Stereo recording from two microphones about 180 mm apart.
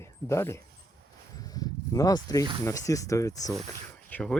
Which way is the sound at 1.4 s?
20° left (ahead or behind).